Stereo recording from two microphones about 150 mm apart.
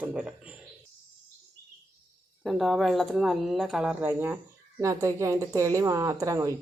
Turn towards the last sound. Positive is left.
turn(degrees=-20)  # may be behind; listen again after turning